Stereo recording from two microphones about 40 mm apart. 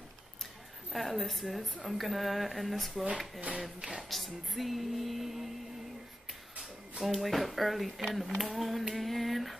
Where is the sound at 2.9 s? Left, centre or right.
Right.